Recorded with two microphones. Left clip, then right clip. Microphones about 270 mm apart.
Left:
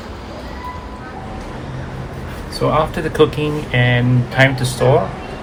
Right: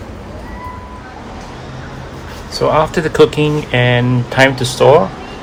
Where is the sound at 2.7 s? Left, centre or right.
Right.